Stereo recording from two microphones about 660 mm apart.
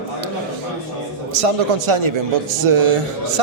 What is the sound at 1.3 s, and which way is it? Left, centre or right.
A man's voice, right.